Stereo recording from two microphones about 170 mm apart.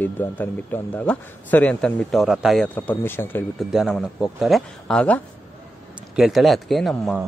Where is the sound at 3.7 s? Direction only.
Centre (ahead or behind).